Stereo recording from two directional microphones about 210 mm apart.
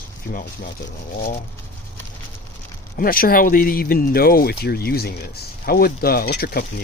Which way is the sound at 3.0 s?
45° left (ahead or behind).